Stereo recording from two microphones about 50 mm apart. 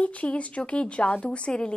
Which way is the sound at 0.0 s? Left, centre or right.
Left.